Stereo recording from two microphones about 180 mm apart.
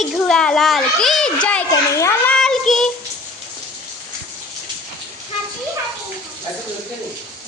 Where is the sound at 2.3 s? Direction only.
5° left (ahead or behind).